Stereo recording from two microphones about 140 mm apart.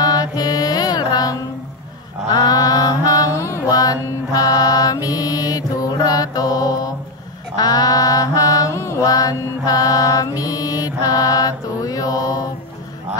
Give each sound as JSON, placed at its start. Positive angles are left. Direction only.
{"t": 0.0, "sound": "music", "side_deg": 30}
{"t": 2.3, "sound": "mantra", "side_deg": 25}